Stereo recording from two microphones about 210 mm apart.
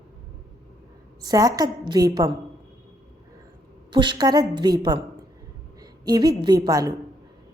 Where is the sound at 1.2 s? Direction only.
15° right (ahead or behind).